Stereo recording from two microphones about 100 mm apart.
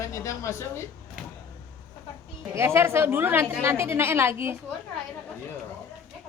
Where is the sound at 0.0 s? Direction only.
30° left (ahead or behind).